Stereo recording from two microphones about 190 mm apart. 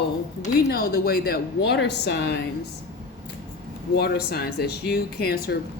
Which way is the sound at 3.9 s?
55° left (ahead or behind).